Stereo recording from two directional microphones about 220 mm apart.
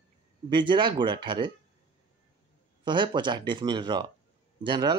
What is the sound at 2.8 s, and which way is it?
Speech, 20° right (ahead or behind).